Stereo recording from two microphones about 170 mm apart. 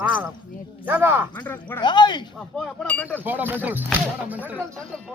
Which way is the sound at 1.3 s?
10° left (ahead or behind).